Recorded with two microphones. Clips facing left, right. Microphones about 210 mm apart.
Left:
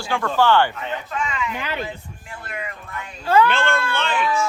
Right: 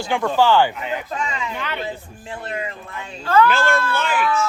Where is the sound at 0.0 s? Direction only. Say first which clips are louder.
Right 2 dB; 20° right (ahead or behind).